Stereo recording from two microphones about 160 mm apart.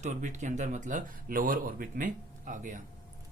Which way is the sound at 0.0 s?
50° right (ahead or behind).